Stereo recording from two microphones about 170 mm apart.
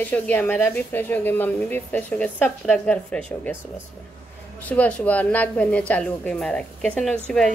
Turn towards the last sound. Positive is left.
turn(degrees=5)  # may be behind; listen again after turning